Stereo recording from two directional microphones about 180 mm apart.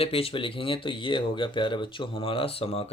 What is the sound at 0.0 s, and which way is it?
Speech, 30° left (ahead or behind).